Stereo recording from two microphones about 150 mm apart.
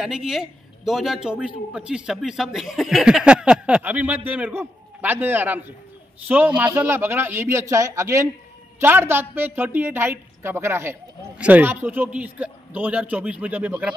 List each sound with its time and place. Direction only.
0.0 s a man's voice: 5° right (ahead or behind)